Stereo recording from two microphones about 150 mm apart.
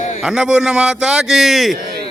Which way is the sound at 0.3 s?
5° right (ahead or behind).